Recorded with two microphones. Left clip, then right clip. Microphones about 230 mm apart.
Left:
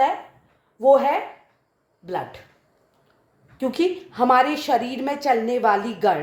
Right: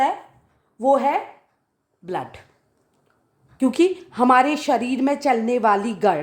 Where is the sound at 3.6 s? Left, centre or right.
Right.